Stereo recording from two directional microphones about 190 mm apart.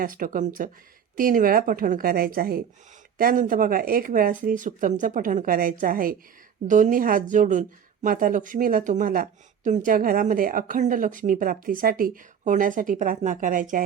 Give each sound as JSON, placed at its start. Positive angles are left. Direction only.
{"t": 0.0, "sound": "a woman's voice", "side_deg": -45}